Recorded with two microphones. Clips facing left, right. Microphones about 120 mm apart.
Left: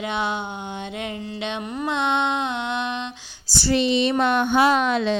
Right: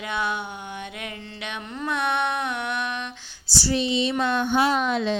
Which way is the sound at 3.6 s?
70° left (ahead or behind).